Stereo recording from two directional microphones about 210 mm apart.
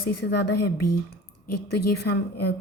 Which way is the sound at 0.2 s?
55° left (ahead or behind).